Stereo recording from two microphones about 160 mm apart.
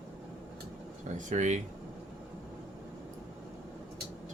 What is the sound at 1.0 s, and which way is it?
Speech, 50° right (ahead or behind).